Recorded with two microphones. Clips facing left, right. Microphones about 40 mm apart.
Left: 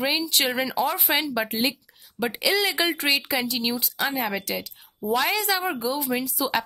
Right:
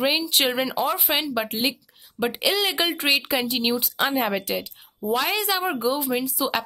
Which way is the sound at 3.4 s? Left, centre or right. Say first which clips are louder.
Right 3 dB; right.